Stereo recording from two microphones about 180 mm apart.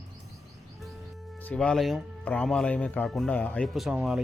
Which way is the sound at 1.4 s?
5° left (ahead or behind).